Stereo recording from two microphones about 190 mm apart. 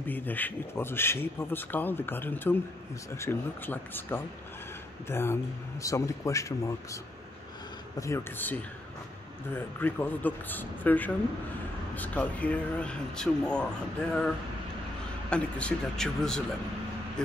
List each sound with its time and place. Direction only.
0.0 s speech: 10° left (ahead or behind)
8.0 s speech: 15° left (ahead or behind)
15.2 s speech: 5° left (ahead or behind)